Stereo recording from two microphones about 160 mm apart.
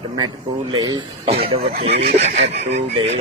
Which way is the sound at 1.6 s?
70° right (ahead or behind).